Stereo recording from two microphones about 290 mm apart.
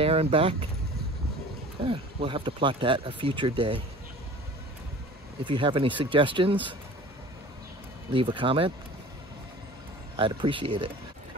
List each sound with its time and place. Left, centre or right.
0.0 s speech: centre
1.9 s speech: centre
5.4 s speech: centre
8.1 s speech: centre
10.1 s speech: centre